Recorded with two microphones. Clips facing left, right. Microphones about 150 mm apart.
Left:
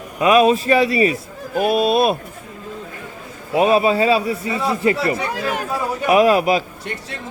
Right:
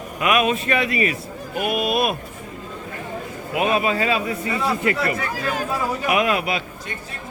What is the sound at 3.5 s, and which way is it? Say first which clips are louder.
A man's voice: left 6 dB; 35° left (ahead or behind).